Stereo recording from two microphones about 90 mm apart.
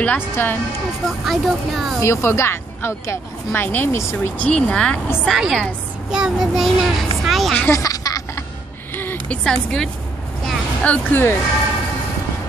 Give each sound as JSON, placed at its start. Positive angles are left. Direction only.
{"t": 0.0, "sound": "speech", "side_deg": 20}
{"t": 1.0, "sound": "speech", "side_deg": 0}
{"t": 2.0, "sound": "speech", "side_deg": 30}
{"t": 4.4, "sound": "a woman's voice", "side_deg": 15}
{"t": 5.3, "sound": "a child's voice", "side_deg": 0}
{"t": 7.7, "sound": "a sound", "side_deg": 40}
{"t": 8.9, "sound": "a sound", "side_deg": 20}
{"t": 9.4, "sound": "a woman's voice", "side_deg": 10}